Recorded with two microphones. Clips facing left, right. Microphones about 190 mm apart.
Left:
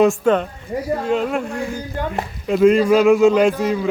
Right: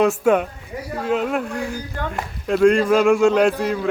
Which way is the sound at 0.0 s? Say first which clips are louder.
Left 2 dB; 5° right (ahead or behind).